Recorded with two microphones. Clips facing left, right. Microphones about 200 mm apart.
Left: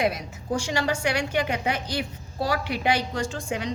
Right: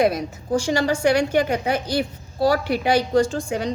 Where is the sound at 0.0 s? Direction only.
35° right (ahead or behind).